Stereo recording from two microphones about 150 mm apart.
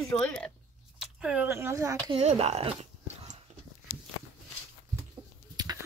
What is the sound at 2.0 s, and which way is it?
Speech, 40° right (ahead or behind).